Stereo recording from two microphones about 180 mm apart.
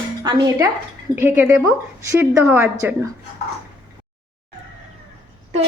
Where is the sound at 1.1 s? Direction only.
10° right (ahead or behind).